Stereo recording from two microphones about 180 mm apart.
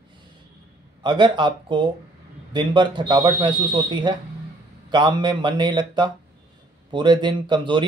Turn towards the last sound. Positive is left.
turn(degrees=-25)  # may be behind; listen again after turning